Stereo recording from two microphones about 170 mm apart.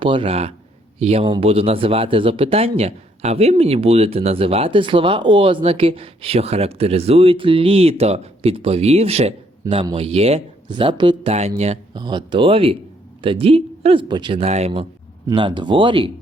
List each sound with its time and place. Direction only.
0.0 s speech: 30° right (ahead or behind)
11.9 s speech: 25° right (ahead or behind)